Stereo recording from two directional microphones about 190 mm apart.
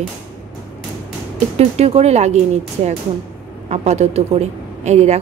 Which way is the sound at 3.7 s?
35° right (ahead or behind).